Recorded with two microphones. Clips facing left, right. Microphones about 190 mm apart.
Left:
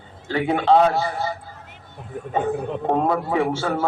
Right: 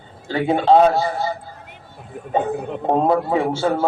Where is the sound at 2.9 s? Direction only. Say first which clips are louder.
Right 4 dB; 30° right (ahead or behind).